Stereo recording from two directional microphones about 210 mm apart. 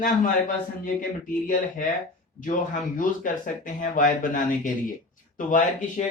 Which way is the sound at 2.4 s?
40° left (ahead or behind).